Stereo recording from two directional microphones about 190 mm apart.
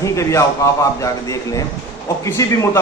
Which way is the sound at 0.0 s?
15° left (ahead or behind).